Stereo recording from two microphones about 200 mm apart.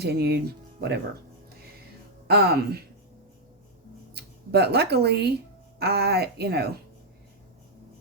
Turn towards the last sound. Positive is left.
turn(degrees=-55)  # may be behind; listen again after turning